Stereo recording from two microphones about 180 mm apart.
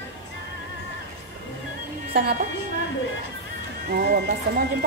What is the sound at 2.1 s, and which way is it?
Speech, 55° right (ahead or behind).